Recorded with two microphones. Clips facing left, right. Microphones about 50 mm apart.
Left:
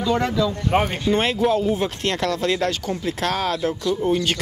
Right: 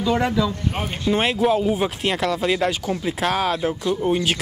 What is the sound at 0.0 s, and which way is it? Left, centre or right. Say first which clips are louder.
Speech: even; centre.